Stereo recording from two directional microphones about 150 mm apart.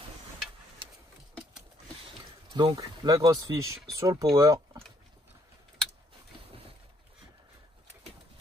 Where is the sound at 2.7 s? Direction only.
25° right (ahead or behind).